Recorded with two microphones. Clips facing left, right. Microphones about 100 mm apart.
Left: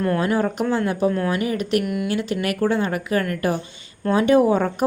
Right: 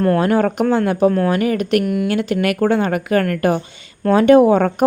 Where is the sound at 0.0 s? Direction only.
55° right (ahead or behind).